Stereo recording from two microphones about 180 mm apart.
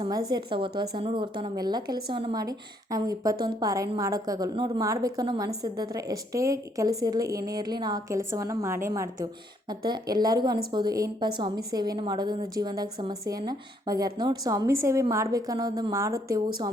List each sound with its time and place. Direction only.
0.0 s a woman's voice: 20° right (ahead or behind)